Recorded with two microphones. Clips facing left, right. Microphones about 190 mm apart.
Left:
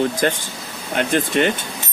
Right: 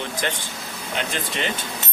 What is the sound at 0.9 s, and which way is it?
Speech, 50° left (ahead or behind).